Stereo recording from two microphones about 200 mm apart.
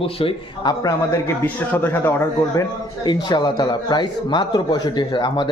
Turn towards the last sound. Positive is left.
turn(degrees=25)  # may be behind; listen again after turning